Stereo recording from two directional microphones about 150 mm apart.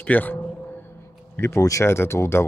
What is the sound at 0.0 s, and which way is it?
Speech, 10° left (ahead or behind).